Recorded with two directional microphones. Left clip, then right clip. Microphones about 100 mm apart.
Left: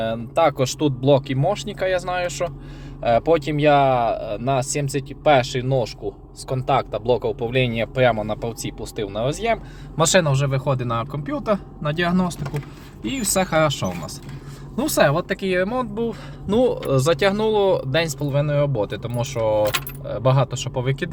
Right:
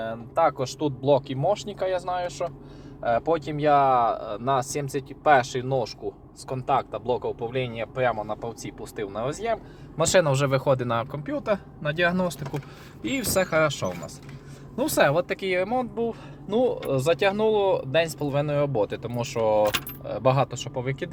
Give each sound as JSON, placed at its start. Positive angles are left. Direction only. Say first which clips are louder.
{"t": 0.0, "sound": "speech", "louder": "left 4 dB", "side_deg": 75}
{"t": 1.3, "sound": "speech", "louder": "left 2 dB", "side_deg": 25}
{"t": 3.6, "sound": "speech", "louder": "left 1 dB", "side_deg": 25}
{"t": 6.5, "sound": "speech", "louder": "left 4 dB", "side_deg": 25}
{"t": 8.4, "sound": "speech", "louder": "left 6 dB", "side_deg": 45}
{"t": 10.3, "sound": "speech", "louder": "right 1 dB", "side_deg": -45}
{"t": 10.6, "sound": "speech", "louder": "even", "side_deg": -25}
{"t": 13.4, "sound": "speech", "louder": "left 4 dB", "side_deg": 0}
{"t": 16.0, "sound": "speech", "louder": "left 3 dB", "side_deg": 40}
{"t": 17.0, "sound": "speech", "louder": "left 2 dB", "side_deg": 20}
{"t": 18.3, "sound": "speech", "louder": "left 3 dB", "side_deg": -20}
{"t": 20.7, "sound": "speech", "louder": "left 5 dB", "side_deg": 20}